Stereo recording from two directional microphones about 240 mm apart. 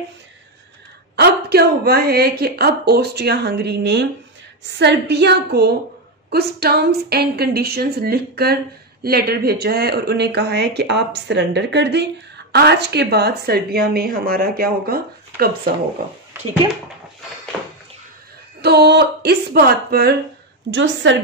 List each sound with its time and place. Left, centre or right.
1.1 s speech: right
16.3 s speech: centre
18.6 s speech: right